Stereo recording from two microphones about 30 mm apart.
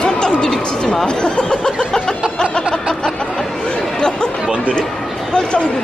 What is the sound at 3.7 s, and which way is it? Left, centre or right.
Chatter, left.